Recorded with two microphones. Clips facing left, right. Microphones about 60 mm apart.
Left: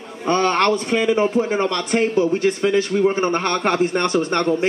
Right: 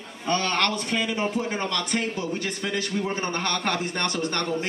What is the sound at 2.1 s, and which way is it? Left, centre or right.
A man's voice, left.